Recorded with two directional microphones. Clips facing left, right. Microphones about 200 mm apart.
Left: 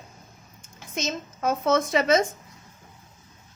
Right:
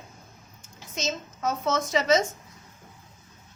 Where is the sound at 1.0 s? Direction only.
55° left (ahead or behind).